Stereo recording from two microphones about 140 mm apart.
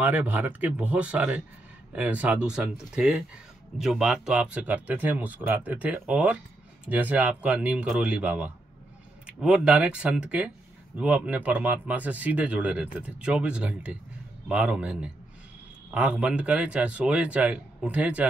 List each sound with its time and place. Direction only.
0.0 s speech: 10° right (ahead or behind)